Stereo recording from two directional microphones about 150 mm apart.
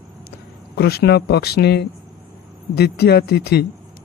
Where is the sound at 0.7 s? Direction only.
90° left.